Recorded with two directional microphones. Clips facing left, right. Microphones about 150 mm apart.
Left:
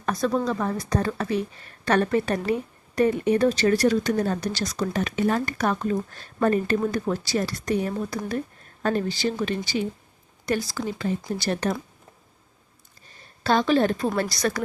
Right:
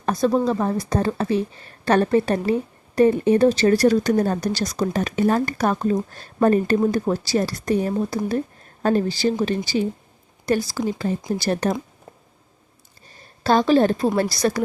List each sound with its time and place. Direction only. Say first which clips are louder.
0.0 s speech: right 5 dB; 30° right (ahead or behind)
13.4 s speech: right 4 dB; 35° right (ahead or behind)